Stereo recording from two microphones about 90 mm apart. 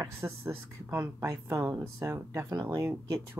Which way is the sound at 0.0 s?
30° right (ahead or behind).